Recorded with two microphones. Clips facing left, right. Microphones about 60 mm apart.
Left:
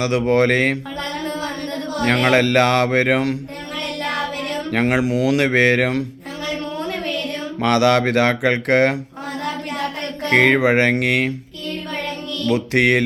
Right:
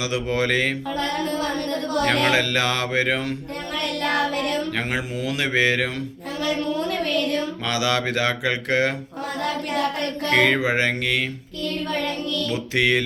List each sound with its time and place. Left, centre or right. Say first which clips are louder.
0.0 s speech: left 7 dB; left
2.3 s speech: left 7 dB; left
4.7 s speech: left 8 dB; left
7.6 s speech: left 12 dB; left
10.2 s speech: left 4 dB; left
10.6 s speech: left 6 dB; left
12.5 s speech: left 7 dB; left